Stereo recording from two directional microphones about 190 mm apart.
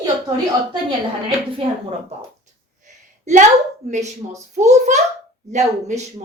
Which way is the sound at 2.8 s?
40° right (ahead or behind).